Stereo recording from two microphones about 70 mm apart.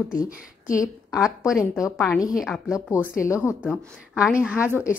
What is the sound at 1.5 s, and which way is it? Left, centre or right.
Speech, left.